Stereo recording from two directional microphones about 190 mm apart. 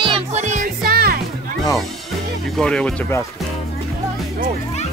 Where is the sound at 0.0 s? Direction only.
30° right (ahead or behind); by 1.2 s 50° right (ahead or behind).